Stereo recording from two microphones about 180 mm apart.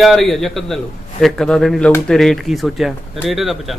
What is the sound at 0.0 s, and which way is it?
Speech, centre (ahead or behind).